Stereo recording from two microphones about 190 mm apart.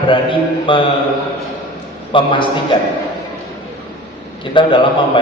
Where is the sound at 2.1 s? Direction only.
25° left (ahead or behind).